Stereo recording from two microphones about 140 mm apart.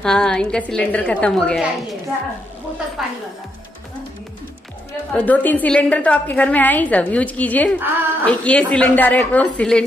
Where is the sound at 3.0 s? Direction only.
Centre (ahead or behind).